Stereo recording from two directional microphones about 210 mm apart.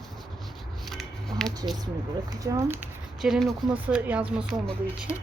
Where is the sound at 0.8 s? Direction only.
Centre (ahead or behind).